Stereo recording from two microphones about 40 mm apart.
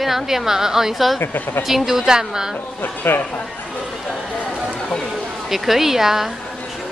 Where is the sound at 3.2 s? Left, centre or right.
Left.